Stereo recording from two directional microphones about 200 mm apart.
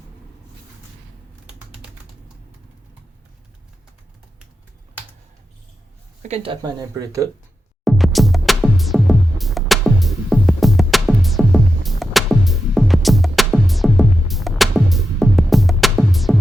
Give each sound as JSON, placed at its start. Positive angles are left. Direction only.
{"t": 6.2, "sound": "speech", "side_deg": -30}
{"t": 7.9, "sound": "music", "side_deg": 0}